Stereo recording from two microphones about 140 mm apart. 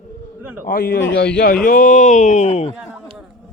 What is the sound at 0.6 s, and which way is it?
A man's voice, 90° left.